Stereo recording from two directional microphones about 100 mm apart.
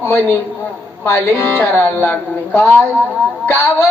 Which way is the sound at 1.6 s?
20° left (ahead or behind).